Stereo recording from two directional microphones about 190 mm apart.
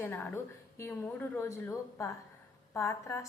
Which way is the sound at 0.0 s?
10° left (ahead or behind).